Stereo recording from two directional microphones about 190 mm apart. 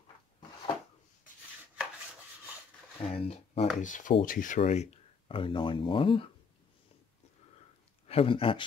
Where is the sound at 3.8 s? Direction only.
40° left (ahead or behind).